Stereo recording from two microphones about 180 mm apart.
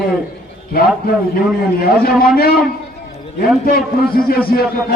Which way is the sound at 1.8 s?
55° left (ahead or behind).